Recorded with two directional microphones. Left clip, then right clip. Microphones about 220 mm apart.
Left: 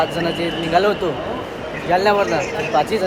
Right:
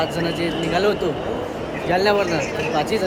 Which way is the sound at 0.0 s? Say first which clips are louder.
Left 2 dB; centre (ahead or behind).